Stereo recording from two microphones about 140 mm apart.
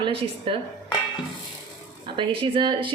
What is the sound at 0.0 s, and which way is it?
Speech, 40° right (ahead or behind).